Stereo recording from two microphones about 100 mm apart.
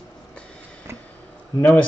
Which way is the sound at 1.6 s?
20° left (ahead or behind).